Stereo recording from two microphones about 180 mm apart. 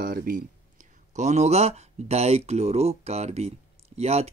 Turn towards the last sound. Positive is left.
turn(degrees=-35)  # may be behind; listen again after turning